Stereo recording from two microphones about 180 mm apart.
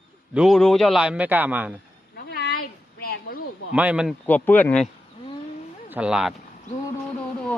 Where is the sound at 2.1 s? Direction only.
65° left (ahead or behind).